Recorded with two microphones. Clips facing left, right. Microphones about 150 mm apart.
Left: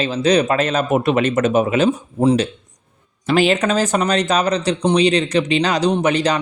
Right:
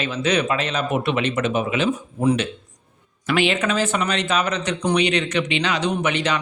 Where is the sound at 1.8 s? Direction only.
30° left (ahead or behind).